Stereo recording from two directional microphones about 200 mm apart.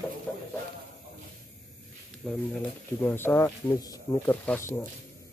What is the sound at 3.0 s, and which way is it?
Speech, 10° left (ahead or behind).